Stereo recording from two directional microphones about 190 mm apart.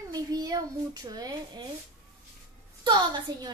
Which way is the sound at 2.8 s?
25° right (ahead or behind).